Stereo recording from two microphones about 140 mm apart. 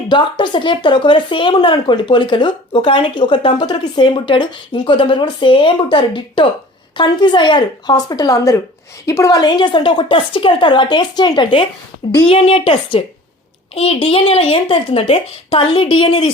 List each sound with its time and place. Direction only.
0.1 s speech: 35° left (ahead or behind)